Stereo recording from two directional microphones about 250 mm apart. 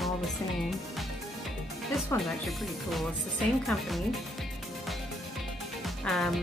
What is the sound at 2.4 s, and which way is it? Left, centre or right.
Speech, centre.